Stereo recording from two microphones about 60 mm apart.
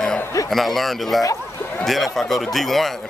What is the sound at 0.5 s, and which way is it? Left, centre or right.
A man's voice, centre.